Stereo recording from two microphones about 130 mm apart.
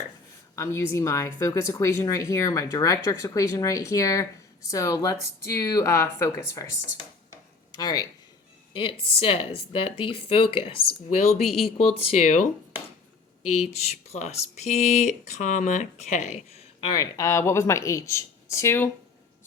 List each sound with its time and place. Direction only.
0.5 s speech: 20° left (ahead or behind)
7.8 s speech: 30° left (ahead or behind)
8.7 s speech: 40° left (ahead or behind); by 16.6 s 60° left (ahead or behind)
16.8 s speech: 30° left (ahead or behind)